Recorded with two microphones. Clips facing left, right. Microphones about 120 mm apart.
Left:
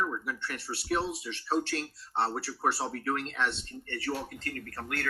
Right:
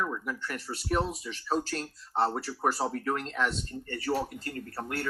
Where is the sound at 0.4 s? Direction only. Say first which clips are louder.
Right 1 dB; 40° right (ahead or behind).